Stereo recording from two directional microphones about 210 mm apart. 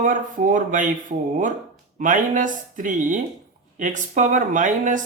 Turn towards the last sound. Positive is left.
turn(degrees=-35)  # may be behind; listen again after turning